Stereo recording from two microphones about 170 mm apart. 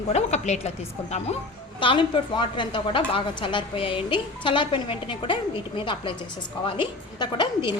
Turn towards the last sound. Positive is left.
turn(degrees=25)  # may be behind; listen again after turning